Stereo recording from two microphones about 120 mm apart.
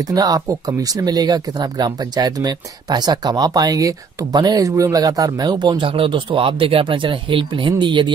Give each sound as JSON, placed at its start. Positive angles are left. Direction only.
{"t": 0.0, "sound": "speech", "side_deg": -30}